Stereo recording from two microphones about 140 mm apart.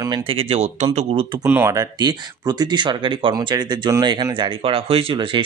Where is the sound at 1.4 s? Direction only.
15° right (ahead or behind).